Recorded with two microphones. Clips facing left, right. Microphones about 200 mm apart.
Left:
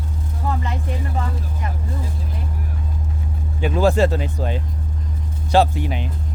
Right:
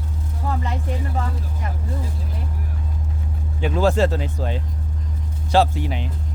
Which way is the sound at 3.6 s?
10° left (ahead or behind).